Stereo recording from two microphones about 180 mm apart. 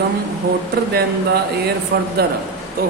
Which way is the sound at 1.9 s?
70° right (ahead or behind).